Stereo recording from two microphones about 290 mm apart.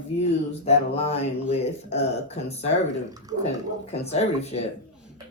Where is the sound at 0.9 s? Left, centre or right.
Left.